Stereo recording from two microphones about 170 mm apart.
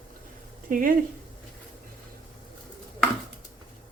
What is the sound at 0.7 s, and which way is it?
Speech, 55° right (ahead or behind).